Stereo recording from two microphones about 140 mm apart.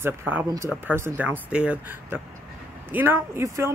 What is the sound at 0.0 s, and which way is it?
Speech, 15° right (ahead or behind).